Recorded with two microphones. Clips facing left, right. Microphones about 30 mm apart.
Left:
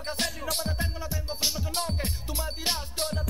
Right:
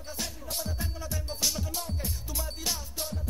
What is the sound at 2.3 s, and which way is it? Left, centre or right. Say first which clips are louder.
Music: left 4 dB; left.